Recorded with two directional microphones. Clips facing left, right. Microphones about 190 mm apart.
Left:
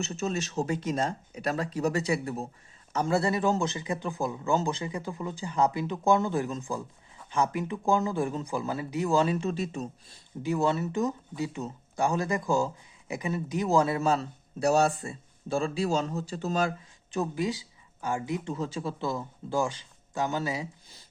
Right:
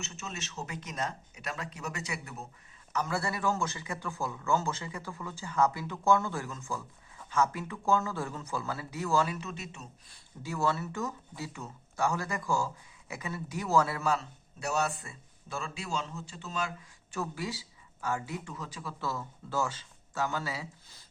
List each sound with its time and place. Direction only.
0.0 s speech: 35° left (ahead or behind)
10.4 s speech: 20° left (ahead or behind); by 16.7 s 40° left (ahead or behind)
17.1 s speech: 20° left (ahead or behind)